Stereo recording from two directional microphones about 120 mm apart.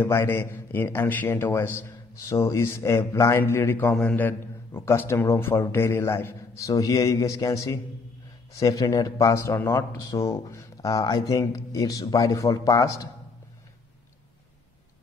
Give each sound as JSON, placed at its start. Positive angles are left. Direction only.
{"t": 0.0, "sound": "a man's voice", "side_deg": 20}